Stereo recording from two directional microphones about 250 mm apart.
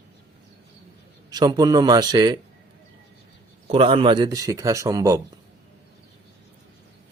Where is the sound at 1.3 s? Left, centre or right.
Centre.